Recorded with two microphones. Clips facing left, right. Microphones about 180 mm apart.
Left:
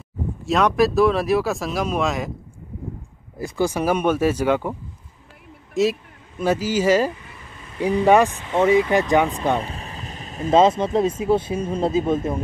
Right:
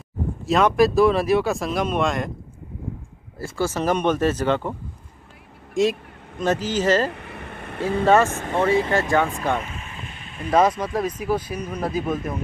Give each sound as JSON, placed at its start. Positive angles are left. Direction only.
{"t": 0.5, "sound": "speech", "side_deg": 0}
{"t": 3.3, "sound": "speech", "side_deg": 15}
{"t": 5.8, "sound": "speech", "side_deg": 5}
{"t": 7.1, "sound": "vehicle", "side_deg": -65}
{"t": 8.0, "sound": "speech", "side_deg": 15}
{"t": 9.6, "sound": "vehicle", "side_deg": 35}
{"t": 10.5, "sound": "speech", "side_deg": 25}